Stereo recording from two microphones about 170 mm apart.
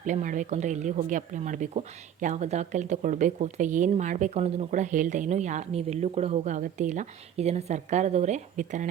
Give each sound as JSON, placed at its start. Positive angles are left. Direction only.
{"t": 0.0, "sound": "a woman's voice", "side_deg": -45}